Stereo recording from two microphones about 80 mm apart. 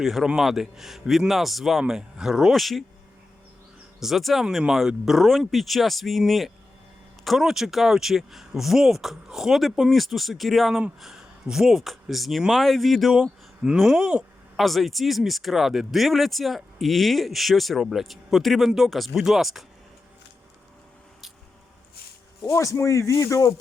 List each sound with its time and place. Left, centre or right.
0.0 s speech: centre
4.0 s speech: centre
14.5 s speech: centre
22.5 s speech: left